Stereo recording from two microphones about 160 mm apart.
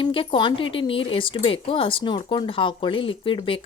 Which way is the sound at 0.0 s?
30° left (ahead or behind).